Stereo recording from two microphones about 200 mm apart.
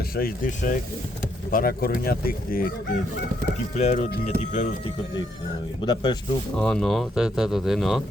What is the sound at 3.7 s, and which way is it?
Speech, 35° left (ahead or behind).